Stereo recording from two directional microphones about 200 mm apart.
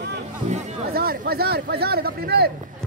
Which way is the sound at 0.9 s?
50° right (ahead or behind).